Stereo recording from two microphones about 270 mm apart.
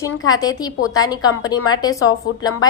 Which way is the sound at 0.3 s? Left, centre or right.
Centre.